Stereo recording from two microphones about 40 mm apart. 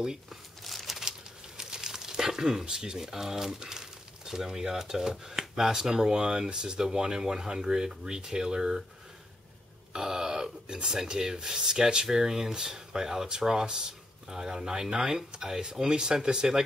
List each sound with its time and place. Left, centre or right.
0.3 s crumpling: centre
1.6 s speech: centre
9.9 s speech: centre